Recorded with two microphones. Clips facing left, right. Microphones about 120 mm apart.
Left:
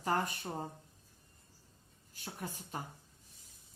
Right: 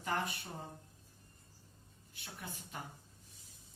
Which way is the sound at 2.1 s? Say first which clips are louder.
Left 5 dB; 40° left (ahead or behind).